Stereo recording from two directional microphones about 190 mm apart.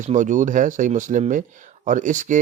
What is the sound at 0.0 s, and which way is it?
Speech, 40° right (ahead or behind).